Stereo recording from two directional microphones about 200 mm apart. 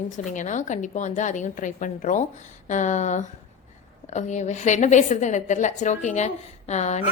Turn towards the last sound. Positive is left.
turn(degrees=35)  # may be behind; listen again after turning